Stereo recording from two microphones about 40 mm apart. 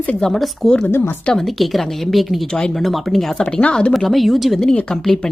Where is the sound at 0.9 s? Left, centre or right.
Left.